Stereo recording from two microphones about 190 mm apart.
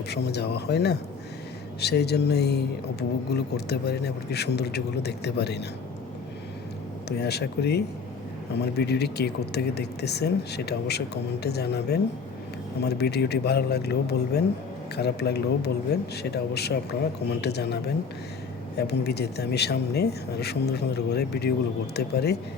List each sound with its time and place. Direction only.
0.1 s speech: 60° left (ahead or behind)
7.2 s speech: 60° left (ahead or behind)